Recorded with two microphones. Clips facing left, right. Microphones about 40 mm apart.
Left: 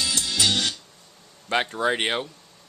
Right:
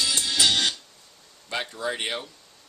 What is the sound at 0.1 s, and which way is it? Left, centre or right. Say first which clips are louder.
Music: right 1 dB; centre.